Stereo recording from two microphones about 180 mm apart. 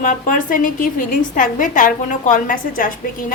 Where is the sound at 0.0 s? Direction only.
45° left (ahead or behind).